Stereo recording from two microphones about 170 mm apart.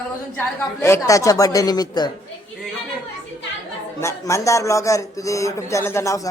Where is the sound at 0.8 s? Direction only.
15° left (ahead or behind).